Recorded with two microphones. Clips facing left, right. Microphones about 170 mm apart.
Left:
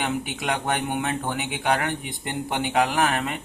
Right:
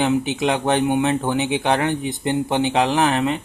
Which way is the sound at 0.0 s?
25° right (ahead or behind).